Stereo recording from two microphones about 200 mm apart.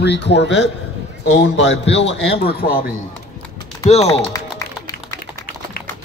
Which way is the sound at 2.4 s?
50° left (ahead or behind).